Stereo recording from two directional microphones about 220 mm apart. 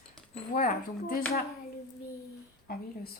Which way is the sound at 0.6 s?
40° left (ahead or behind).